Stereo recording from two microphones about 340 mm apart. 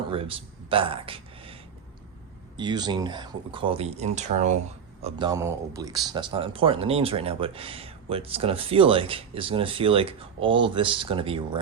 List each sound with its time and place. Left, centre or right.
0.1 s speech: centre
2.6 s speech: centre